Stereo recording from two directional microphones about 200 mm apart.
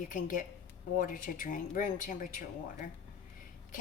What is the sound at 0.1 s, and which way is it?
A woman's voice, 40° left (ahead or behind).